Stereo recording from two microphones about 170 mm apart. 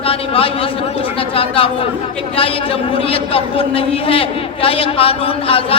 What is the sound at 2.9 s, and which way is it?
A man's voice, 35° left (ahead or behind).